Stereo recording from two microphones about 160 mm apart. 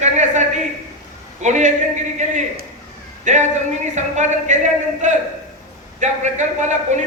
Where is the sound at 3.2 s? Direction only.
45° right (ahead or behind).